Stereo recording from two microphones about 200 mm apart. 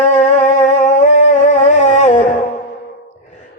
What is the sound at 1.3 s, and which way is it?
Music, 40° left (ahead or behind).